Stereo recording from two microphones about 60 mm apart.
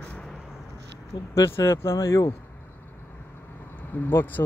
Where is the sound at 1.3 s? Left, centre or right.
Left.